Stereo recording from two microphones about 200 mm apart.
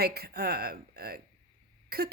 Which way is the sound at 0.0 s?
50° right (ahead or behind).